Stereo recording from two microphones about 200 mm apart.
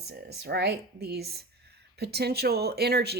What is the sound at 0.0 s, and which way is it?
Speech, 55° right (ahead or behind).